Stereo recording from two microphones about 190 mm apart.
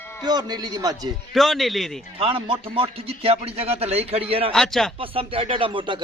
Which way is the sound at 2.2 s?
30° right (ahead or behind).